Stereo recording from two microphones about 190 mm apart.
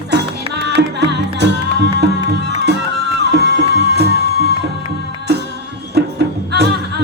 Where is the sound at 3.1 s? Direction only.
60° right (ahead or behind).